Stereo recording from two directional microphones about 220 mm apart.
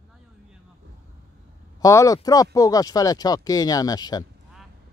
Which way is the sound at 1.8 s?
15° left (ahead or behind).